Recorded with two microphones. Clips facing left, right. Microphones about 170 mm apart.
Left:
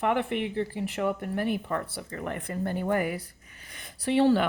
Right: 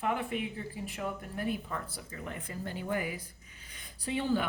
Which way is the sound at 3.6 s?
75° left (ahead or behind).